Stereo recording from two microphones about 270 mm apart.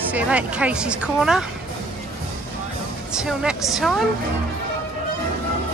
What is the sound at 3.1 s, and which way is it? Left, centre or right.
Speech, centre.